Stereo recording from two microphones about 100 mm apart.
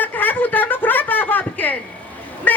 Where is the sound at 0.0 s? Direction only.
20° left (ahead or behind).